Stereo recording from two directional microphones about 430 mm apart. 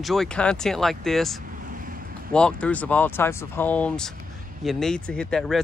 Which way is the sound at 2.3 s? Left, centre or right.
Centre.